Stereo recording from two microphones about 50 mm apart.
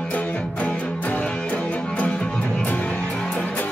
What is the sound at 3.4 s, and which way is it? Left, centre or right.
Music, left.